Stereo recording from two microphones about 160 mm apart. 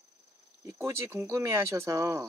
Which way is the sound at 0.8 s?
15° right (ahead or behind).